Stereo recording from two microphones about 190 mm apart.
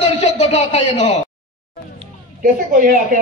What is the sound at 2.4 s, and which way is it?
Speech, 45° right (ahead or behind).